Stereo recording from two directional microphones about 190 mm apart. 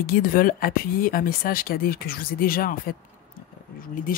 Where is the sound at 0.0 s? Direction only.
50° left (ahead or behind).